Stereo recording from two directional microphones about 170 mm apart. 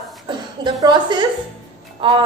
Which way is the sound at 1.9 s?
30° right (ahead or behind).